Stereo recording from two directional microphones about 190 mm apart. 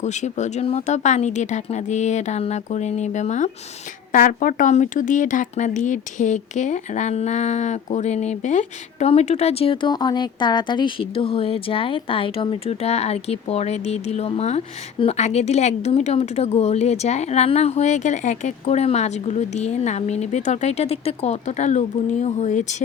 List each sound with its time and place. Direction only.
0.0 s speech: 35° left (ahead or behind)